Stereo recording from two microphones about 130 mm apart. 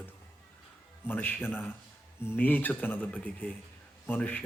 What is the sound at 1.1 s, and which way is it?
Speech, 15° left (ahead or behind).